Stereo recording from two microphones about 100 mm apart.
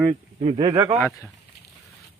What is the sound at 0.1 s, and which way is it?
Speech, 90° right.